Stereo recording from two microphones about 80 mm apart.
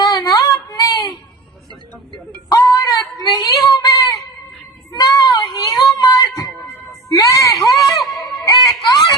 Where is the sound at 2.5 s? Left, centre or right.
Left.